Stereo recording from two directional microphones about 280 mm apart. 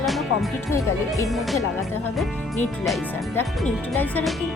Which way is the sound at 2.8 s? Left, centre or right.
Centre.